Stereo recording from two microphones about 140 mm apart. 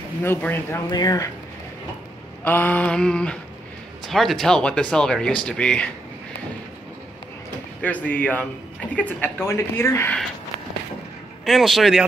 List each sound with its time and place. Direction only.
0.2 s a woman's voice: 15° left (ahead or behind)
0.8 s speech: 25° left (ahead or behind)
2.4 s a woman's voice: 15° left (ahead or behind)
7.8 s a woman's voice: 10° left (ahead or behind)
11.4 s speech: centre (ahead or behind)